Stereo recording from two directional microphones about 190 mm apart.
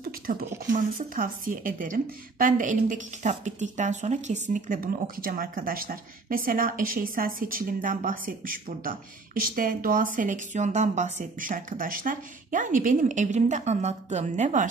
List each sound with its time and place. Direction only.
0.3 s a woman's voice: 45° right (ahead or behind)